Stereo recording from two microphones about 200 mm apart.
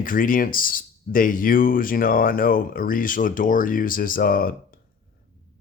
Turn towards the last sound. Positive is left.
turn(degrees=45)  # may be behind; listen again after turning